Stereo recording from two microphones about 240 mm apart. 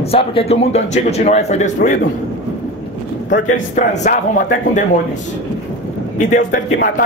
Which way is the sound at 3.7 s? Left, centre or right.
Left.